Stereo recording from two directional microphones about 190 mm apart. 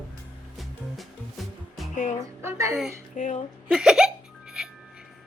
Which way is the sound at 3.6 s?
5° right (ahead or behind).